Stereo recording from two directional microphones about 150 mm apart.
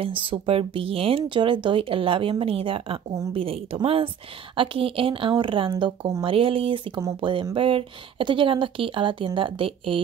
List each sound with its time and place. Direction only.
0.0 s speech: 35° right (ahead or behind)